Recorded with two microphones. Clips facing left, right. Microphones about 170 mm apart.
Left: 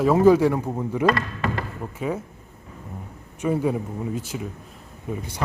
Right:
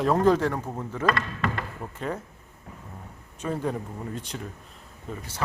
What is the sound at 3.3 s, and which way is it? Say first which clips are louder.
Speech: left 6 dB; 10° left (ahead or behind).